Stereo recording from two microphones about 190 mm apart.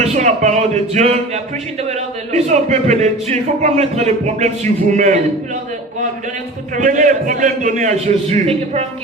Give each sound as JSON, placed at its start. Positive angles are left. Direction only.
{"t": 0.0, "sound": "speech", "side_deg": -35}
{"t": 6.7, "sound": "a man's voice", "side_deg": -45}